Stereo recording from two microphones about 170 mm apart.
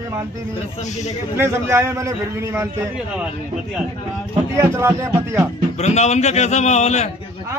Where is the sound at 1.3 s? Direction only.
15° right (ahead or behind).